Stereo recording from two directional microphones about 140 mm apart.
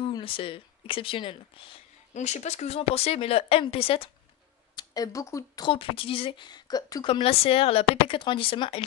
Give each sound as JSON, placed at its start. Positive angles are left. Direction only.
{"t": 0.1, "sound": "speech", "side_deg": 40}
{"t": 2.1, "sound": "a woman's voice", "side_deg": 55}
{"t": 4.7, "sound": "speech", "side_deg": 25}
{"t": 5.7, "sound": "a woman's voice", "side_deg": 40}